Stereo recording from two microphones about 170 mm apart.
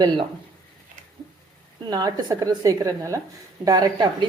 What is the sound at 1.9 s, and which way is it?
A woman's voice, 25° right (ahead or behind).